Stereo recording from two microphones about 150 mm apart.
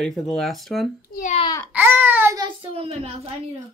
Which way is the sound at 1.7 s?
15° right (ahead or behind).